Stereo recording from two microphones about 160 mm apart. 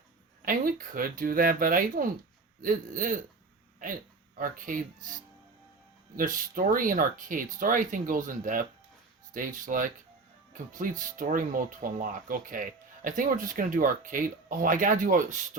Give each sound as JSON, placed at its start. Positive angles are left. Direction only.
{"t": 0.4, "sound": "speech", "side_deg": -60}
{"t": 4.4, "sound": "speech", "side_deg": -60}